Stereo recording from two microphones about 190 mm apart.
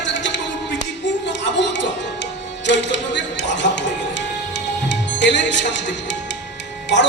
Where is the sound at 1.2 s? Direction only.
70° left (ahead or behind).